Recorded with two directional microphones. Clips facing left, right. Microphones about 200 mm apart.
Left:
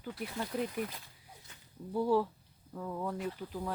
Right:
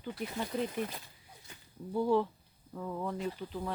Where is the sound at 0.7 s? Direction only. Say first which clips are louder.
Right 1 dB; 25° right (ahead or behind).